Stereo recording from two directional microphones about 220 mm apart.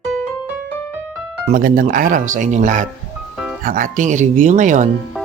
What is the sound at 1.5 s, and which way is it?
Speech, 40° right (ahead or behind).